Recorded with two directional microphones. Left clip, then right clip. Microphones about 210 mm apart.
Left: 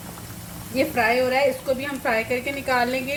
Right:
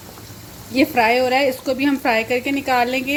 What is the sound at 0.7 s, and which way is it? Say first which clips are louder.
A woman's voice: right 5 dB; 55° right (ahead or behind).